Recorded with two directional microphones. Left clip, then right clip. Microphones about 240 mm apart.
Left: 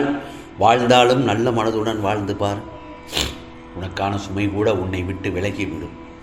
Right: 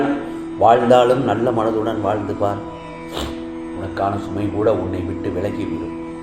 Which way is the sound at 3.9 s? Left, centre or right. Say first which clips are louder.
Right 1 dB; left.